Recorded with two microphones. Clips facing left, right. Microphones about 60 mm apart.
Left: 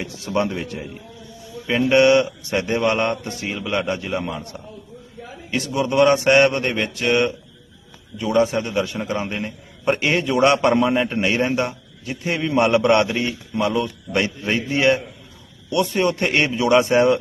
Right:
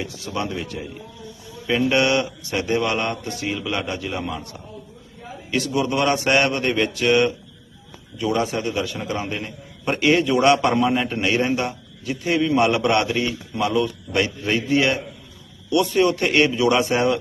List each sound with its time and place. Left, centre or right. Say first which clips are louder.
0.0 s mantra: left 5 dB; left
1.9 s mantra: left 8 dB; left
5.5 s a man's voice: even; centre
13.7 s mantra: right 3 dB; centre
14.4 s a man's voice: left 2 dB; centre
15.7 s mantra: right 1 dB; left